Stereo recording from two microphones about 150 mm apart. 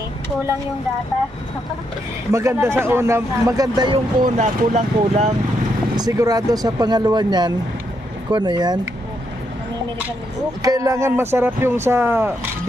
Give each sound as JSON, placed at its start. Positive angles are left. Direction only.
{"t": 2.3, "sound": "speech", "side_deg": -20}
{"t": 4.2, "sound": "speech", "side_deg": -50}
{"t": 6.0, "sound": "speech", "side_deg": -20}
{"t": 10.6, "sound": "speech", "side_deg": -20}